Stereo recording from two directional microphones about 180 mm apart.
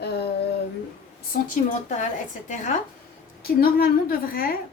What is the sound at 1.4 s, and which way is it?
A woman's voice, 45° left (ahead or behind).